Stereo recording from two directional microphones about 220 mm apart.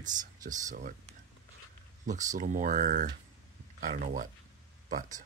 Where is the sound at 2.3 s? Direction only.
35° right (ahead or behind).